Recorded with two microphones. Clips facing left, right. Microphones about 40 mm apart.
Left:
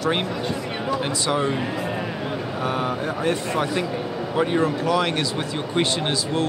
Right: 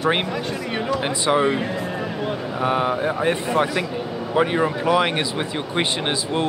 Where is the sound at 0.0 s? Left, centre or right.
Right.